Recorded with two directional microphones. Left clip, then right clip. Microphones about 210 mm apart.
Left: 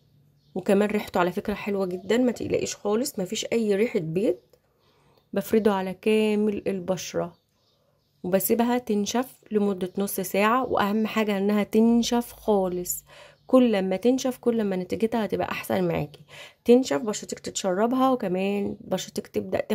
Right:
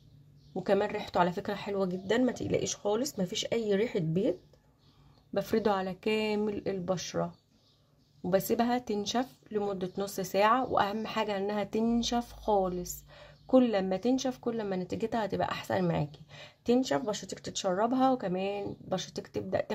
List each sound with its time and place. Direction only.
0.6 s speech: 30° left (ahead or behind)